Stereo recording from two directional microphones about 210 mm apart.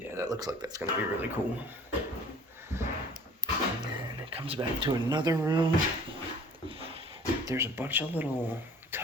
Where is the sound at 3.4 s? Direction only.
25° right (ahead or behind).